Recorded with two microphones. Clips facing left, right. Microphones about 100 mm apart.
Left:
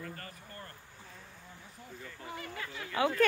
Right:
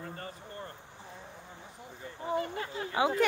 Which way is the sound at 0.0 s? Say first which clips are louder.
Right 3 dB; 25° right (ahead or behind).